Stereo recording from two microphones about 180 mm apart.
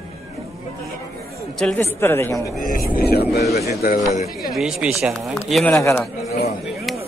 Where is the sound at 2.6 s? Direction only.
50° left (ahead or behind).